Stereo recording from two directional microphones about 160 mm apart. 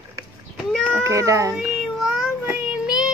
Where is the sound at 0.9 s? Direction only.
20° right (ahead or behind).